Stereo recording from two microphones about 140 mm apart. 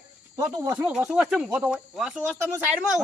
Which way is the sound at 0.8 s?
5° right (ahead or behind).